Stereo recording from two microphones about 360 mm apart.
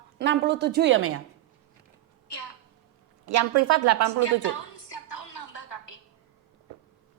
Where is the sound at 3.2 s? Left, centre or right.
Right.